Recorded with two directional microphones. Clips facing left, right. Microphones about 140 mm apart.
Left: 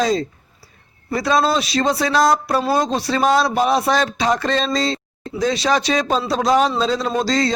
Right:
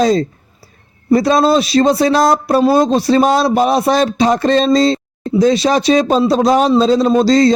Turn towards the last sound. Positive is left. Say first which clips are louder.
# right 9 dB
turn(degrees=-30)  # may be behind; listen again after turning